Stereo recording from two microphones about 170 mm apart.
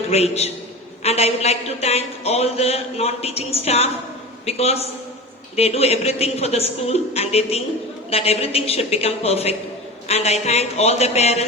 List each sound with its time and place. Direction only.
0.1 s a man's voice: 40° left (ahead or behind)